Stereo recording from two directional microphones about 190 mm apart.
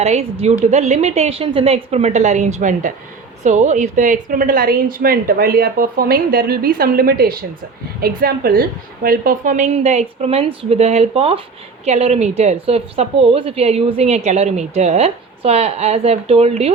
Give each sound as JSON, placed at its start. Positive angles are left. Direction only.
{"t": 0.0, "sound": "a woman's voice", "side_deg": -35}